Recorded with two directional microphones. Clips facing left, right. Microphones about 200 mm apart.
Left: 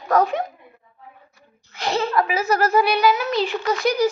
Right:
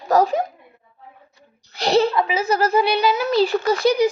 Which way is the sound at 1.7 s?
35° right (ahead or behind).